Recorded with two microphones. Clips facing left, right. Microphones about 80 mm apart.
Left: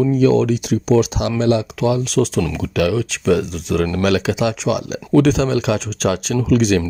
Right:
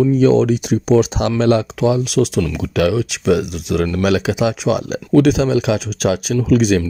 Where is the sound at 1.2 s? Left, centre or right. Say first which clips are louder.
Right 2 dB; right.